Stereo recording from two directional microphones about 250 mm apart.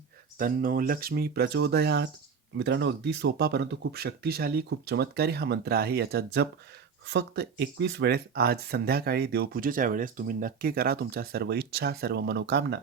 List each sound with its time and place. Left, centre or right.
0.3 s speech: right